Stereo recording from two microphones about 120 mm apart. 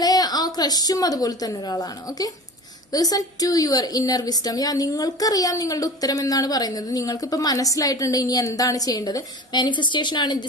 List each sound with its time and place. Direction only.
0.0 s a woman's voice: 35° left (ahead or behind)